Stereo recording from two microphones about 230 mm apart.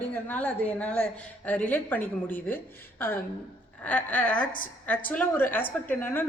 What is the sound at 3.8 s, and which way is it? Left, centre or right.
A woman's voice, centre.